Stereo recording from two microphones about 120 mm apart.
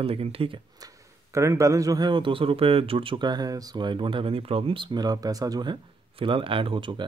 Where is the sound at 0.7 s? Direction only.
30° right (ahead or behind).